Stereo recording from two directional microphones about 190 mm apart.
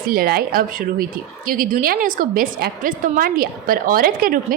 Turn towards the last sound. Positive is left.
turn(degrees=-50)  # may be behind; listen again after turning